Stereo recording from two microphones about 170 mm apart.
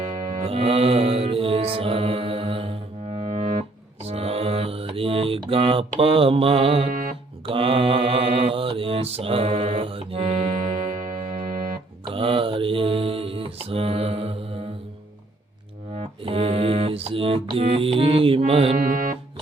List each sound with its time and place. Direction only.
0.0 s mantra: 50° right (ahead or behind)
0.4 s mantra: 35° right (ahead or behind); by 11.8 s 50° right (ahead or behind)
12.0 s mantra: 30° right (ahead or behind)
16.0 s music: 35° right (ahead or behind)